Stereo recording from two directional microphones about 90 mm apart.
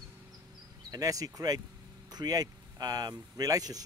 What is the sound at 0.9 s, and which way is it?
Speech, 40° right (ahead or behind).